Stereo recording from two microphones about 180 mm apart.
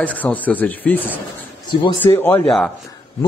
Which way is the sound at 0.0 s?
10° left (ahead or behind).